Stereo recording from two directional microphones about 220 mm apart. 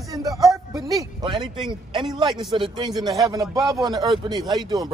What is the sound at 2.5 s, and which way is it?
A man's voice, 20° right (ahead or behind).